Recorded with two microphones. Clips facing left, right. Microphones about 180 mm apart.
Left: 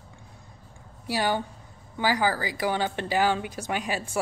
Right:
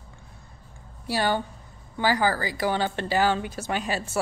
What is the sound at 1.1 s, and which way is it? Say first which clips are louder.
Speech: right 1 dB; 10° left (ahead or behind).